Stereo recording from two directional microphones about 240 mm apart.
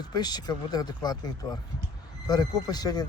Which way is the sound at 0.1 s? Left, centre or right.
Centre.